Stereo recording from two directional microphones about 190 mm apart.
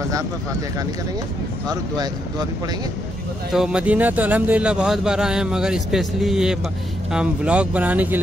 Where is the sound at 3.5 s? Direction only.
5° right (ahead or behind).